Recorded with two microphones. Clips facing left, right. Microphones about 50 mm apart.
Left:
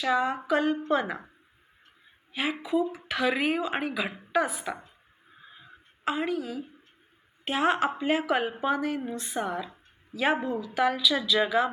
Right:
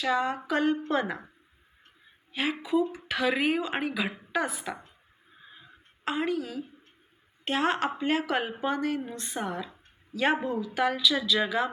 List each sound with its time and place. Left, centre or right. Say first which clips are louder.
0.0 s a woman's voice: left 1 dB; centre
2.3 s a woman's voice: even; centre
6.1 s a woman's voice: even; centre